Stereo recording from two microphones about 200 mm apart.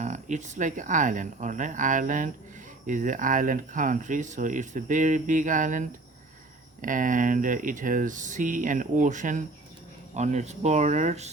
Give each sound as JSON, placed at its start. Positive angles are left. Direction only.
{"t": 0.0, "sound": "speech", "side_deg": -35}